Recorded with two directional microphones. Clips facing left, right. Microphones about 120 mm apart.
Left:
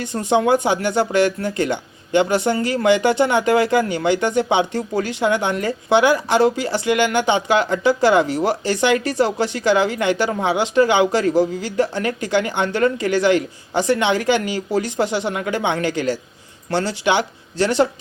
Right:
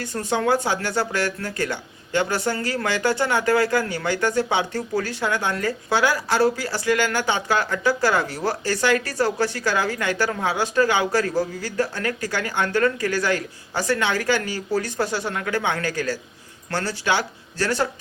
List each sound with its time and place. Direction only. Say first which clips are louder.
0.0 s speech: left 5 dB; 20° left (ahead or behind)